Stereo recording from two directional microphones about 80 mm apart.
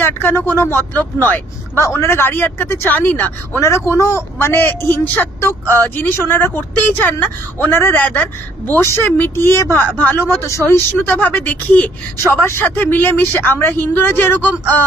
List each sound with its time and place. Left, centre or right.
0.0 s a man's voice: left
3.6 s a man's voice: left
8.7 s a man's voice: left
11.1 s speech: centre
12.3 s a man's voice: left